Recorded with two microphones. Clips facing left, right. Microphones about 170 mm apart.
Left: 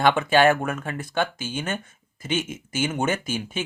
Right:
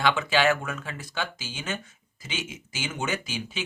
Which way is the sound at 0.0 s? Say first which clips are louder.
Left 5 dB; 55° left (ahead or behind).